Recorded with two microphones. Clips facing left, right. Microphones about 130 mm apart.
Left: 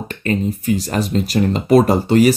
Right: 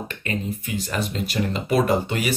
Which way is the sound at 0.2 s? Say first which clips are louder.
Left 10 dB; 35° left (ahead or behind).